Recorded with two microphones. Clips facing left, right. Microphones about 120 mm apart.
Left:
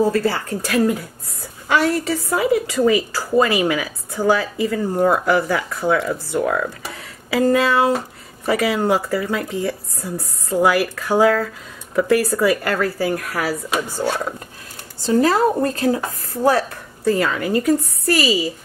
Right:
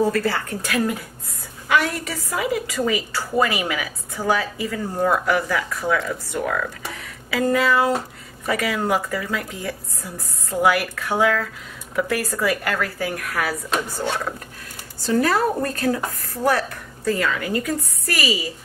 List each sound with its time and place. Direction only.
0.1 s a woman's voice: 30° left (ahead or behind)
6.9 s a sound: 30° left (ahead or behind)
8.5 s a woman's voice: 30° left (ahead or behind)
15.0 s a woman's voice: 25° left (ahead or behind)